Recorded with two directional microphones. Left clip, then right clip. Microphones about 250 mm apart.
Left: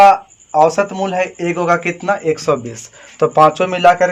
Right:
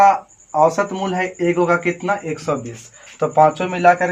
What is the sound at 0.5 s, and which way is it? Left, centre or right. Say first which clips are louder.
A man's voice: left 3 dB; left.